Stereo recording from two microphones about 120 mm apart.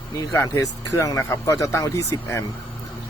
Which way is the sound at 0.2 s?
30° left (ahead or behind).